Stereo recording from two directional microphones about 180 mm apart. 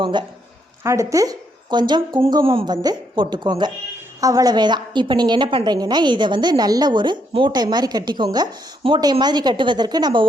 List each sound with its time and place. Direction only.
0.0 s a woman's voice: 25° right (ahead or behind)